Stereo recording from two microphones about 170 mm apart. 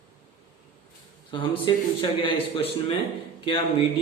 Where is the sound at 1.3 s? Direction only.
30° left (ahead or behind).